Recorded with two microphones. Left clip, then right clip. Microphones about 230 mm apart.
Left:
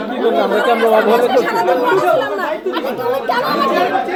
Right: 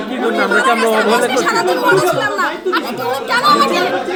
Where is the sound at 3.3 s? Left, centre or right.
Right.